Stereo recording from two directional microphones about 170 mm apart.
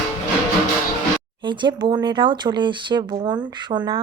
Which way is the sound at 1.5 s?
25° right (ahead or behind).